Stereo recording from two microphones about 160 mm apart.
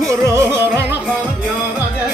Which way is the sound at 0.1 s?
20° right (ahead or behind).